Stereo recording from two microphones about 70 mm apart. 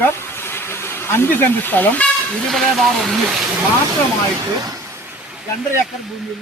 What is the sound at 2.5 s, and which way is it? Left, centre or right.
Speech, centre.